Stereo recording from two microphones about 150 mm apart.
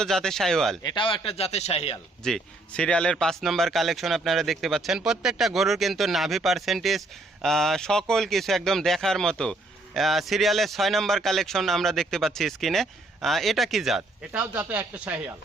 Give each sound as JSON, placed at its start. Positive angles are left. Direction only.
{"t": 0.0, "sound": "speech", "side_deg": 5}
{"t": 0.8, "sound": "speech", "side_deg": 30}
{"t": 2.2, "sound": "speech", "side_deg": 5}